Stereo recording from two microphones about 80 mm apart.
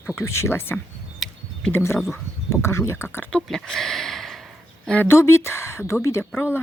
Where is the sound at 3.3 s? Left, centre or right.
Centre.